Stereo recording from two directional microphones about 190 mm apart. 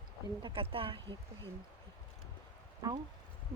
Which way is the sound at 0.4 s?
30° right (ahead or behind).